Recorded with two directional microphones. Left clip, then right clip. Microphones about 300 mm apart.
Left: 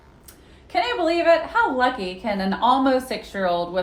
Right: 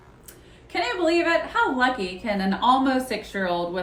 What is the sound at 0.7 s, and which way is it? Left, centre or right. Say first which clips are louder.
A woman's voice: left 2 dB; centre.